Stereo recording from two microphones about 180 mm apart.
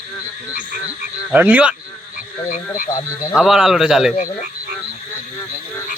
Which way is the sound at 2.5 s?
45° left (ahead or behind).